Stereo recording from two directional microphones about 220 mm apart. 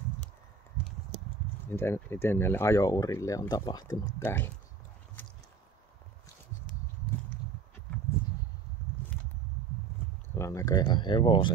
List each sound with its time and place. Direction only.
1.7 s speech: 10° left (ahead or behind)
8.8 s a sound: 10° left (ahead or behind)
10.3 s speech: 15° left (ahead or behind)